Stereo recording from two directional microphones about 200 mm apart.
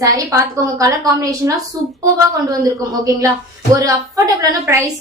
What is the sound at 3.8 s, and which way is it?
A woman's voice, 15° right (ahead or behind).